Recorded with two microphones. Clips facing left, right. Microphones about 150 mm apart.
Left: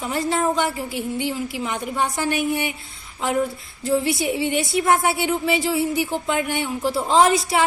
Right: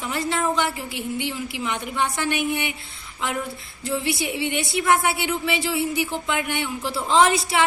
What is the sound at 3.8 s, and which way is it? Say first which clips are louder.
A woman's voice: left 5 dB; 45° left (ahead or behind).